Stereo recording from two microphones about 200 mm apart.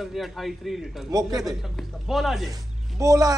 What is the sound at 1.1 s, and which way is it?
Speech, 20° right (ahead or behind).